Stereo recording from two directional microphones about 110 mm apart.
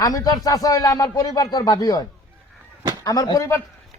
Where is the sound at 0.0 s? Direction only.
35° left (ahead or behind).